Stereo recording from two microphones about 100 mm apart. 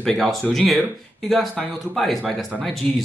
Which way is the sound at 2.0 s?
Centre (ahead or behind).